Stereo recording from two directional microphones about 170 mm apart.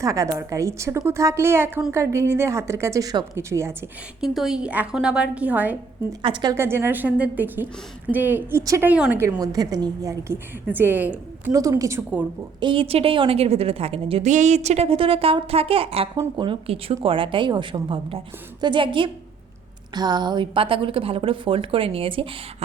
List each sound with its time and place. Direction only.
0.0 s a woman's voice: 20° right (ahead or behind)
4.2 s a woman's voice: 5° right (ahead or behind)
6.2 s a woman's voice: 30° right (ahead or behind)
6.5 s a woman's voice: 15° right (ahead or behind)
12.5 s a woman's voice: 30° right (ahead or behind)